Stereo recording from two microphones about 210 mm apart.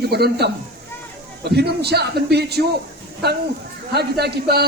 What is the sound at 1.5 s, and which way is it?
Speech, 50° right (ahead or behind).